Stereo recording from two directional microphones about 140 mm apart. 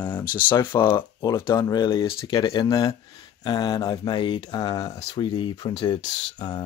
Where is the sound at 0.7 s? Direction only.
15° left (ahead or behind).